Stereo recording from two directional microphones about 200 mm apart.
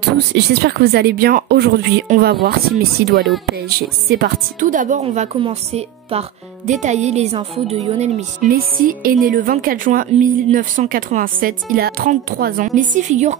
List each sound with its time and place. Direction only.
0.3 s speech: 55° right (ahead or behind); by 8.5 s 35° right (ahead or behind)
8.5 s speech: 45° right (ahead or behind)